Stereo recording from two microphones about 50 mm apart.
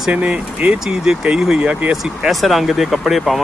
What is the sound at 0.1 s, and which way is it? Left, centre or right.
Speech, right.